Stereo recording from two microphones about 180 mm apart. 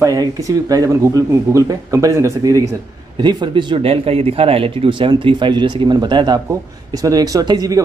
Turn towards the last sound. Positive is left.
turn(degrees=-20)  # may be behind; listen again after turning